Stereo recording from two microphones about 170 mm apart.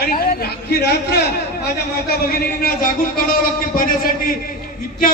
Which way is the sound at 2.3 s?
60° left (ahead or behind).